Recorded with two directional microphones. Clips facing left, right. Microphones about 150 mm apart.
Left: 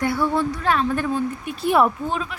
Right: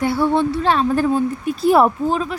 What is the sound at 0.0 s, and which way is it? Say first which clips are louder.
A woman's voice: right 4 dB; 25° right (ahead or behind).